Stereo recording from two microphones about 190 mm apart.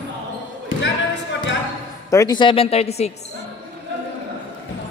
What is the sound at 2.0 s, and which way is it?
Speech, 20° left (ahead or behind).